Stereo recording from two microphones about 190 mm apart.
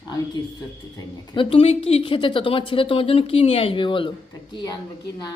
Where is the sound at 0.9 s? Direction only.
25° left (ahead or behind).